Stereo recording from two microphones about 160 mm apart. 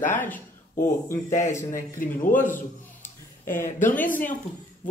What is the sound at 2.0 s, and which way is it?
Speech, 60° left (ahead or behind).